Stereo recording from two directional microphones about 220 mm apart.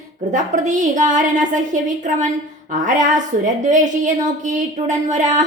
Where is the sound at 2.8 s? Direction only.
35° right (ahead or behind).